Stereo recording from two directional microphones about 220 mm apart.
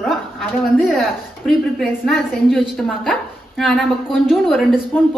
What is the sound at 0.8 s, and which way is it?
A woman's voice, centre (ahead or behind).